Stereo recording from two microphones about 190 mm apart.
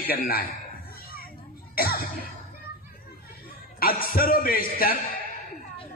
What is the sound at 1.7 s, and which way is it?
Music, 50° left (ahead or behind).